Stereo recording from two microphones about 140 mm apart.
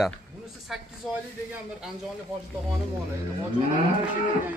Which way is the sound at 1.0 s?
Centre (ahead or behind).